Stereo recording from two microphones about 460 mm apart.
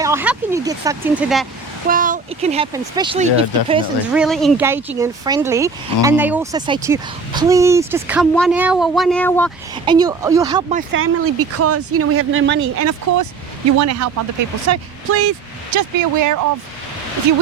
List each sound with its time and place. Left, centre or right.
0.0 s speech: centre
1.9 s speech: centre
9.7 s speech: centre
11.0 s speech: right